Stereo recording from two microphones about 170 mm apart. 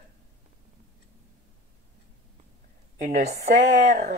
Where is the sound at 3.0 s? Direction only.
45° right (ahead or behind).